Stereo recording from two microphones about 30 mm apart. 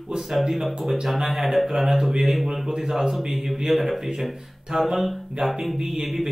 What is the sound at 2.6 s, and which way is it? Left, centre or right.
Speech, centre.